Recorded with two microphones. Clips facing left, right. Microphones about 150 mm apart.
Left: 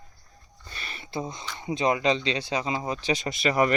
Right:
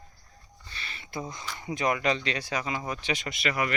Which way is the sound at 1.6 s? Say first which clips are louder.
Left 3 dB; 25° left (ahead or behind).